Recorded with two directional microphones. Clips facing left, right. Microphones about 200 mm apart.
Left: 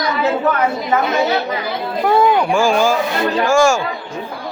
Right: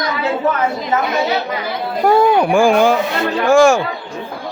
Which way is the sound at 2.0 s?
50° right (ahead or behind).